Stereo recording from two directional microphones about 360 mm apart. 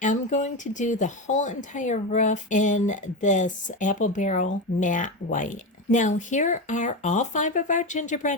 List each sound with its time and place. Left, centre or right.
0.0 s speech: left